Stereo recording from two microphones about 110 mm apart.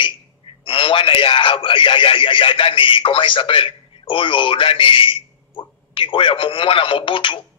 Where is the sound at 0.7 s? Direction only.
50° left (ahead or behind).